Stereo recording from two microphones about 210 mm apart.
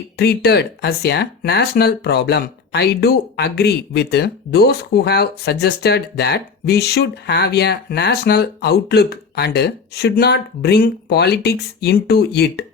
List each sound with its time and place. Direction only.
0.2 s speech: 50° left (ahead or behind)